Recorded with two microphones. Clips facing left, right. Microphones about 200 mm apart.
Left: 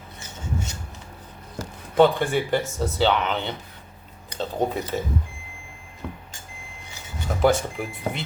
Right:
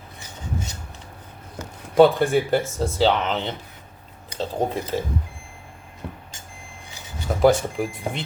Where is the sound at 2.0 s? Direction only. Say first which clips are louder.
Right 3 dB; 45° right (ahead or behind).